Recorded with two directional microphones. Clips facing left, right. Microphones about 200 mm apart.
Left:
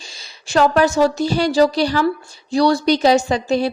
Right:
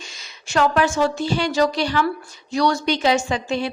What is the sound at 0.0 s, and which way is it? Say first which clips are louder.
A woman's voice: even; 35° left (ahead or behind).